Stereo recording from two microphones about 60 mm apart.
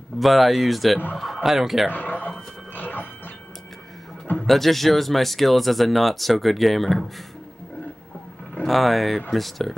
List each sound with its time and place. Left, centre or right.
0.2 s speech: centre
1.9 s speech: left
2.7 s a sound: left
4.5 s speech: centre
8.6 s speech: centre